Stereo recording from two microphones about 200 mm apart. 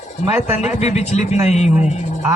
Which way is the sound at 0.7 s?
35° left (ahead or behind).